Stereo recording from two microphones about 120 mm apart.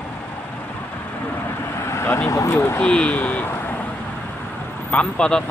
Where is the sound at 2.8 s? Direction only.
10° left (ahead or behind).